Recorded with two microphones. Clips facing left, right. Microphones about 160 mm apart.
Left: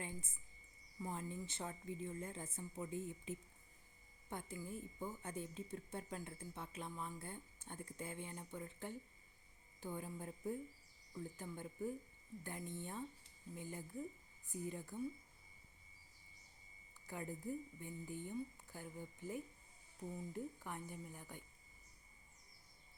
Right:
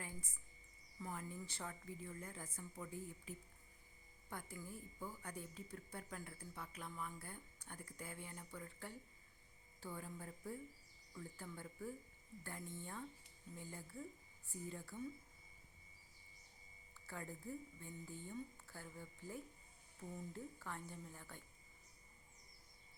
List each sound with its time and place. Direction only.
0.0 s a sound: 25° left (ahead or behind)
0.9 s a woman's voice: 20° left (ahead or behind)
17.1 s a woman's voice: 15° left (ahead or behind)